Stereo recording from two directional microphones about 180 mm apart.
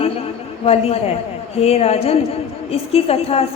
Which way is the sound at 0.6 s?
35° left (ahead or behind).